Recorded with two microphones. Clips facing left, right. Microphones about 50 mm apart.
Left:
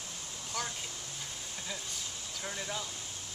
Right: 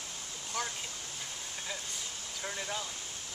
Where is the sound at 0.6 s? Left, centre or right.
Centre.